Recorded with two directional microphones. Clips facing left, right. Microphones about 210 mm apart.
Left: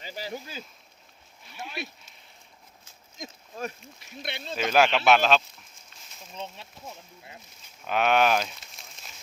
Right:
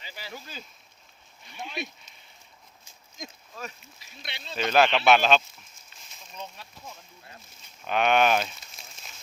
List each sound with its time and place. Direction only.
0.0 s speech: 45° left (ahead or behind)
1.5 s a sound: 5° left (ahead or behind)
3.6 s speech: 50° left (ahead or behind)
4.5 s speech: 5° left (ahead or behind)
6.3 s speech: 25° left (ahead or behind)
7.9 s speech: 5° left (ahead or behind)